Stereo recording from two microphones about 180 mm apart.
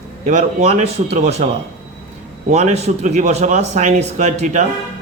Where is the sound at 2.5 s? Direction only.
40° right (ahead or behind).